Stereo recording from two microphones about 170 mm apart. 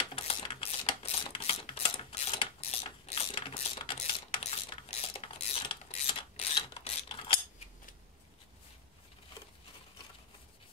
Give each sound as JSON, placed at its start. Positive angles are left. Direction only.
{"t": 0.1, "sound": "typewriter", "side_deg": 30}
{"t": 3.3, "sound": "coin", "side_deg": 30}
{"t": 6.0, "sound": "mechanisms", "side_deg": 30}